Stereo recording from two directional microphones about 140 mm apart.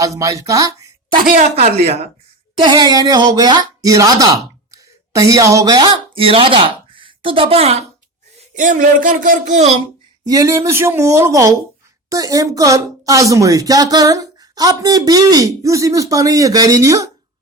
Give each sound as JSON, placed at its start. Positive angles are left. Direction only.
{"t": 0.0, "sound": "speech", "side_deg": -25}
{"t": 1.4, "sound": "speech", "side_deg": -50}
{"t": 2.6, "sound": "speech", "side_deg": -35}
{"t": 8.4, "sound": "speech", "side_deg": -65}
{"t": 10.2, "sound": "a woman's voice", "side_deg": -25}